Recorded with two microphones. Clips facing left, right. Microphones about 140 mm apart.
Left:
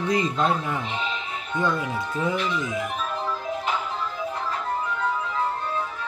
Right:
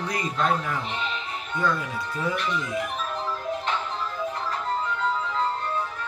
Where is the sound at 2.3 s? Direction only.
5° left (ahead or behind).